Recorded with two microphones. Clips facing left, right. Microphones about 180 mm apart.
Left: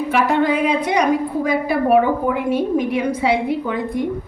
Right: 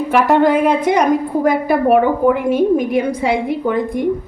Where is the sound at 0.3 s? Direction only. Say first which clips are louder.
Right 6 dB; 50° right (ahead or behind).